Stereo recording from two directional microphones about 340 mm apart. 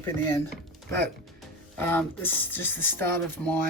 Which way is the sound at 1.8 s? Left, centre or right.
Centre.